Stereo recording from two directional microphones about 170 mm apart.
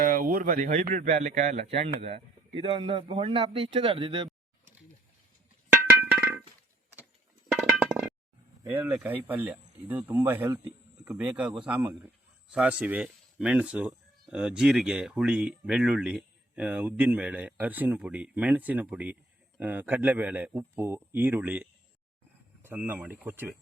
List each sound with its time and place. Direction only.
0.0 s speech: 55° right (ahead or behind); by 4.3 s 30° right (ahead or behind)
5.7 s percussion: 10° right (ahead or behind)
7.6 s music: centre (ahead or behind)
8.6 s speech: 10° right (ahead or behind)